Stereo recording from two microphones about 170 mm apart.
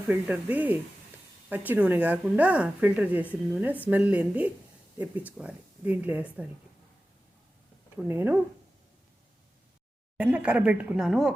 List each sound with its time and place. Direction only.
0.1 s speech: 10° right (ahead or behind)
7.9 s speech: 10° right (ahead or behind)
10.2 s speech: 10° right (ahead or behind)